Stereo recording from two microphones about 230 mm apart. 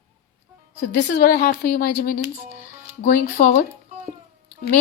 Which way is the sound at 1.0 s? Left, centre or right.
Left.